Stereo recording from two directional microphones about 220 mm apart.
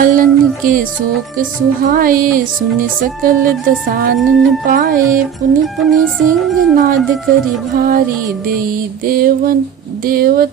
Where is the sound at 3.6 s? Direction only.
40° right (ahead or behind).